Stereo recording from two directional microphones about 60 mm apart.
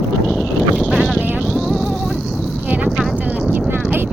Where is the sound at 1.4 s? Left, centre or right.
Centre.